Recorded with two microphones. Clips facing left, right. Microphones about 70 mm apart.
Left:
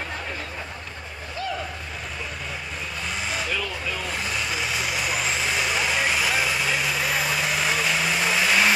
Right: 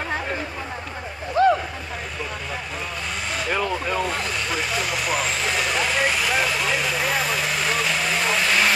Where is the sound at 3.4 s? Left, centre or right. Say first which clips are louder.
Right 5 dB; right.